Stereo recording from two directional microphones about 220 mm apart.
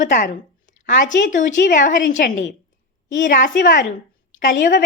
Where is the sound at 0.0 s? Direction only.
40° left (ahead or behind).